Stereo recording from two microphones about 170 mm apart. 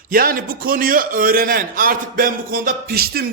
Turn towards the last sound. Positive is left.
turn(degrees=-65)  # may be behind; listen again after turning